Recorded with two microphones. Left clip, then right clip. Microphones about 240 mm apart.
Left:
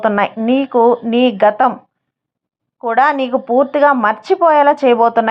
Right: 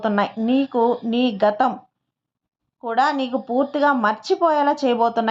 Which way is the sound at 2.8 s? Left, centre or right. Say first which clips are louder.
Left 7 dB; left.